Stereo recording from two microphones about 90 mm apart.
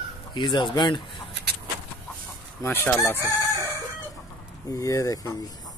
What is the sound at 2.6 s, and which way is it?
Speech, 30° left (ahead or behind).